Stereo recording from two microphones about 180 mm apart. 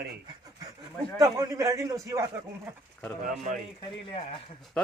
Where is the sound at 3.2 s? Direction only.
45° right (ahead or behind).